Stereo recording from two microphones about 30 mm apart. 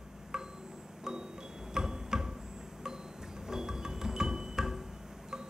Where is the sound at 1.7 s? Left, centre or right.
Right.